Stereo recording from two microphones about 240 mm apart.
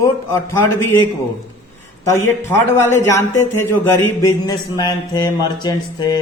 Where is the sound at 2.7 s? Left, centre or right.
Centre.